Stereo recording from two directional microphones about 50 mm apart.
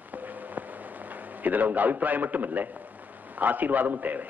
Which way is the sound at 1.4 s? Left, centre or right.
Right.